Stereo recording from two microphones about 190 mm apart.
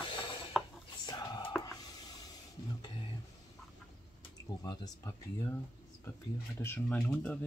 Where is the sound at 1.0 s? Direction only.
20° left (ahead or behind).